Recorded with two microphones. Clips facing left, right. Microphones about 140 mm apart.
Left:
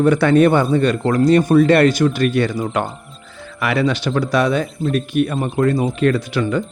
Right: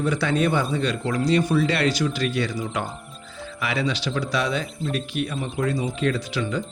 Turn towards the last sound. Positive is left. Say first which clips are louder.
# left 7 dB
turn(degrees=55)  # may be behind; listen again after turning